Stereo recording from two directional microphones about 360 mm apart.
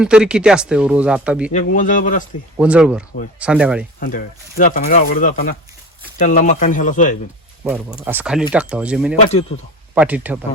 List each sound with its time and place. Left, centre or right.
0.0 s speech: centre
1.5 s speech: left
2.6 s speech: centre
4.0 s speech: left
7.6 s speech: centre